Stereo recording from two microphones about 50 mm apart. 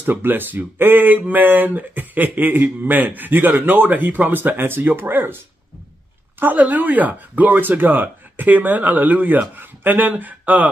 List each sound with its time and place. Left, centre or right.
0.0 s speech: right
6.4 s speech: right